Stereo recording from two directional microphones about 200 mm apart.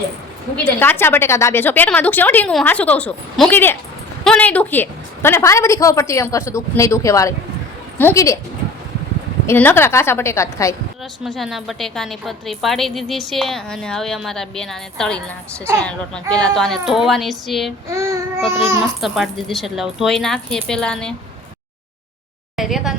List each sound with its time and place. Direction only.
0.5 s a woman's voice: 10° left (ahead or behind)
9.5 s a woman's voice: 10° left (ahead or behind)
11.2 s a woman's voice: centre (ahead or behind)
16.3 s a woman's voice: 5° left (ahead or behind)
17.9 s child singing: 15° right (ahead or behind)
18.7 s a woman's voice: 5° right (ahead or behind)
22.5 s speech: centre (ahead or behind)